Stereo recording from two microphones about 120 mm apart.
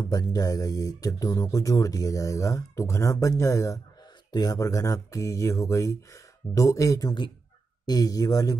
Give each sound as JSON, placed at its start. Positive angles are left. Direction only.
{"t": 0.1, "sound": "speech", "side_deg": 30}